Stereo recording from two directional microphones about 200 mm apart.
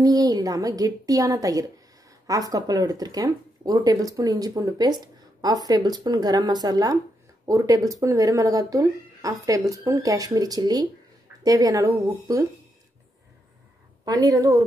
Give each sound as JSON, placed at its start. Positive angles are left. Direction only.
{"t": 0.0, "sound": "speech", "side_deg": -20}
{"t": 14.0, "sound": "speech", "side_deg": -20}